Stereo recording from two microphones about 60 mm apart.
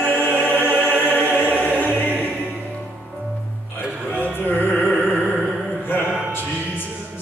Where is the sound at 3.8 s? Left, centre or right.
Centre.